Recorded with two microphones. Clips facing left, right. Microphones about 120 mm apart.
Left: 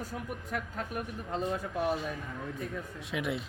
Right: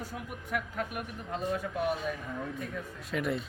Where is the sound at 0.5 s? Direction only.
30° left (ahead or behind).